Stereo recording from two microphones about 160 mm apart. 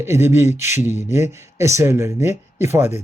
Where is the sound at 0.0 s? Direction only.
15° right (ahead or behind).